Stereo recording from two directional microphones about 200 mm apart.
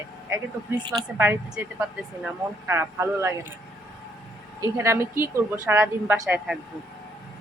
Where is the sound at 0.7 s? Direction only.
20° right (ahead or behind).